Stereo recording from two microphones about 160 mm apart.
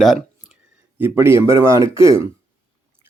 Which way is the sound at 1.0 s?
15° right (ahead or behind).